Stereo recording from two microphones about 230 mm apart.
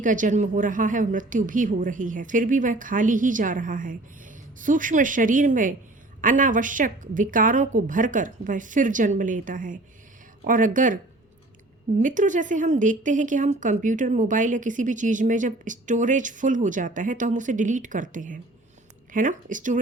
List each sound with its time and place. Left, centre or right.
0.0 s speech: right
11.9 s speech: right